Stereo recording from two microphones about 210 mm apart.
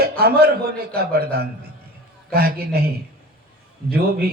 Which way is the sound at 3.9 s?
45° right (ahead or behind).